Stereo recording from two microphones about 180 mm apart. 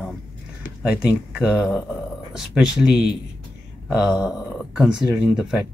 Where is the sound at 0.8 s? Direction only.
5° right (ahead or behind).